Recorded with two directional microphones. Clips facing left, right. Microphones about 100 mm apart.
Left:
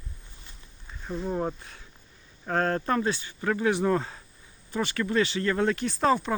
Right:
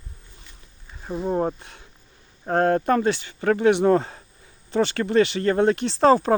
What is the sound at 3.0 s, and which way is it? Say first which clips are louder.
Speech: right 6 dB; 65° right (ahead or behind).